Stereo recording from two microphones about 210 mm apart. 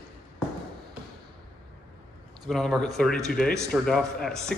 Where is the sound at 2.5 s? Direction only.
Centre (ahead or behind).